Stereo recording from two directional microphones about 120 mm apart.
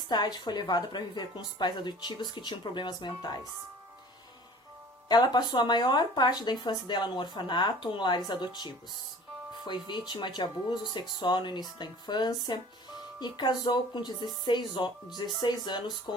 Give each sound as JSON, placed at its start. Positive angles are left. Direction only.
{"t": 0.1, "sound": "speech", "side_deg": 35}
{"t": 5.0, "sound": "speech", "side_deg": 35}